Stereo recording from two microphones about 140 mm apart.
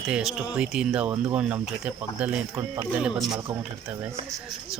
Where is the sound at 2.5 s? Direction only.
20° right (ahead or behind).